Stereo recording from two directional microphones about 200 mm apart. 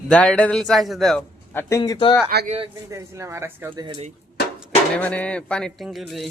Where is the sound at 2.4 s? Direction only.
30° right (ahead or behind).